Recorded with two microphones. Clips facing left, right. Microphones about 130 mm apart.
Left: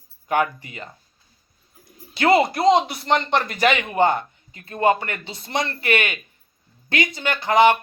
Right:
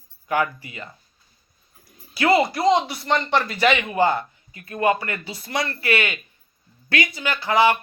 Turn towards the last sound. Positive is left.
turn(degrees=20)  # may be behind; listen again after turning